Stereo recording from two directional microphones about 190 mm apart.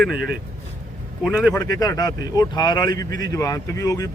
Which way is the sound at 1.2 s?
5° right (ahead or behind).